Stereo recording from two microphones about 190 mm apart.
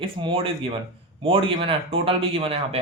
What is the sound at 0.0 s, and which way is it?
Speech, 30° right (ahead or behind).